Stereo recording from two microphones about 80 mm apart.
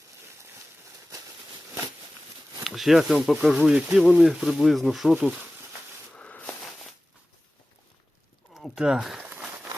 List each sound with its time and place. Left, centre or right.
2.6 s speech: centre
6.1 s a sound: centre
8.5 s speech: centre